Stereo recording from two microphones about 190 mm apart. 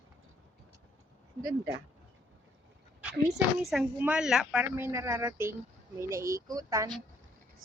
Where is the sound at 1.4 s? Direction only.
20° right (ahead or behind).